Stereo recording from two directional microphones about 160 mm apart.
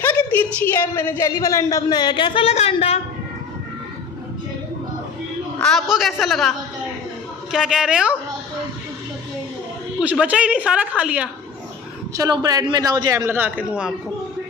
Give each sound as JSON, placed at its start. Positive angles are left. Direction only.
{"t": 0.0, "sound": "a sound", "side_deg": 10}
{"t": 0.6, "sound": "a woman's voice", "side_deg": 15}
{"t": 5.6, "sound": "a man's voice", "side_deg": 0}
{"t": 7.5, "sound": "a man's voice", "side_deg": -5}
{"t": 9.9, "sound": "a woman's voice", "side_deg": -5}
{"t": 12.2, "sound": "a man's voice", "side_deg": -25}